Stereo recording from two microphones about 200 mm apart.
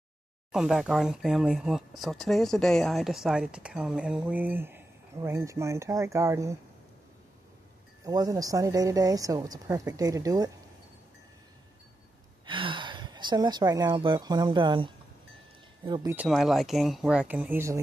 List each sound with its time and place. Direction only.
0.5 s speech: 5° right (ahead or behind)
8.0 s speech: 20° right (ahead or behind)
12.4 s a woman's voice: 25° right (ahead or behind)
16.2 s speech: centre (ahead or behind)